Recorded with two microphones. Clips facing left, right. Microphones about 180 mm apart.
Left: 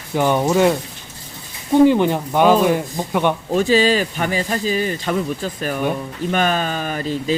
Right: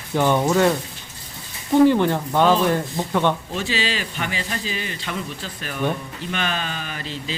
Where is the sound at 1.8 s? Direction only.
15° left (ahead or behind).